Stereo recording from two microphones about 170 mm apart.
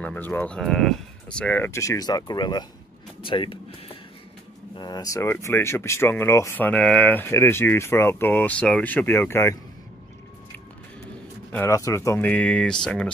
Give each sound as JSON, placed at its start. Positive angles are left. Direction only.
{"t": 0.0, "sound": "speech", "side_deg": 10}
{"t": 11.5, "sound": "speech", "side_deg": 15}